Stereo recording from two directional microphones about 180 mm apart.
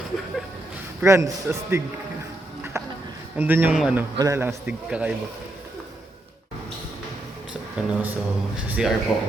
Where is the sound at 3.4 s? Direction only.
10° right (ahead or behind).